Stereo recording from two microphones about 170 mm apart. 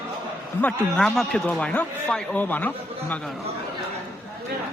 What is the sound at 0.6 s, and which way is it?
A man's voice, 5° left (ahead or behind).